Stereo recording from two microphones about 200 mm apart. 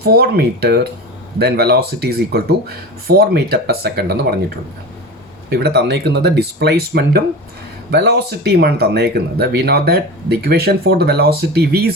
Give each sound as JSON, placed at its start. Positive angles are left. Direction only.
{"t": 0.0, "sound": "speech", "side_deg": -50}